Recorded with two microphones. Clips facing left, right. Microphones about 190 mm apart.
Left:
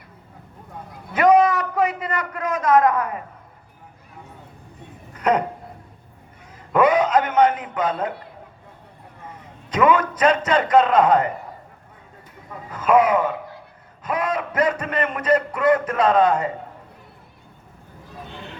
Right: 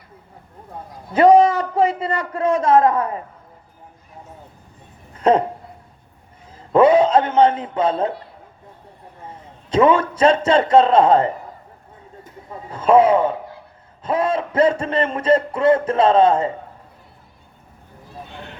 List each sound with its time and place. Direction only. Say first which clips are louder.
1.1 s a man's voice: right 4 dB; 30° right (ahead or behind)
5.1 s a sound: right 4 dB; 25° right (ahead or behind)
6.7 s a man's voice: right 4 dB; 30° right (ahead or behind)
9.2 s a man's voice: right 2 dB; 30° right (ahead or behind)
12.5 s a man's voice: right 3 dB; 30° right (ahead or behind)